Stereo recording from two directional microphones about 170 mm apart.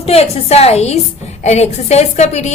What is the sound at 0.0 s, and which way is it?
A woman's voice, 35° left (ahead or behind).